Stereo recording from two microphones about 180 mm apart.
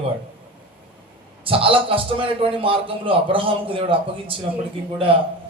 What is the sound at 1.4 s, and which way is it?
A man's voice, 30° right (ahead or behind).